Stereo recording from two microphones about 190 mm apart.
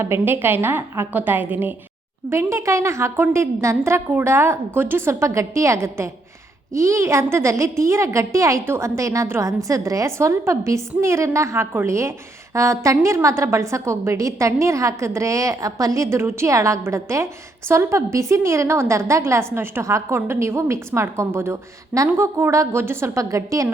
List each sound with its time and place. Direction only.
0.0 s a woman's voice: 10° right (ahead or behind)